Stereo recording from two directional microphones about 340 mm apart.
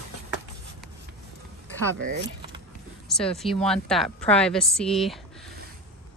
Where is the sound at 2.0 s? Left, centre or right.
Right.